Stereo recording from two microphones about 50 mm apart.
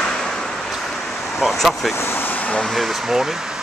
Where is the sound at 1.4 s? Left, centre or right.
Centre.